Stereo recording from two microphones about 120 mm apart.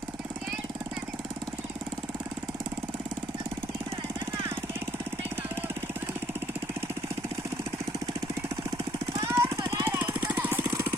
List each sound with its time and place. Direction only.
9.3 s jackhammer: 25° right (ahead or behind)
10.7 s vehicle: 20° right (ahead or behind)